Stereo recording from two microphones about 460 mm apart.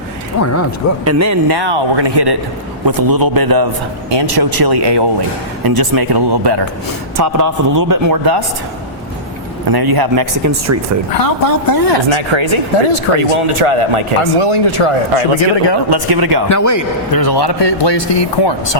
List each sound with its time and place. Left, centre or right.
0.4 s speech: left
1.0 s a man's voice: right
1.5 s speech: right
5.6 s speech: right
7.2 s a man's voice: right
9.6 s speech: right
11.1 s speech: left
12.0 s speech: right
14.2 s speech: left
15.4 s a man's voice: left
15.9 s speech: right
16.5 s a man's voice: left